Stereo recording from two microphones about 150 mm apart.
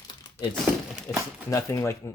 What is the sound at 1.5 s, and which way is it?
Speech, 20° left (ahead or behind).